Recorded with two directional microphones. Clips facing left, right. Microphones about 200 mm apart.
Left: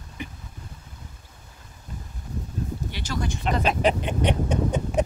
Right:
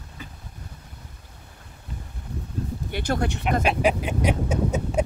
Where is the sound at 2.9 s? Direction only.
55° right (ahead or behind).